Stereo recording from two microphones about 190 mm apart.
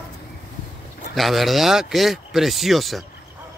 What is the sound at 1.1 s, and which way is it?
Speech, centre (ahead or behind).